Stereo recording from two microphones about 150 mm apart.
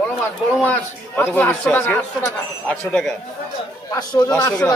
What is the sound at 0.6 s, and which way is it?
A man's voice, 10° left (ahead or behind).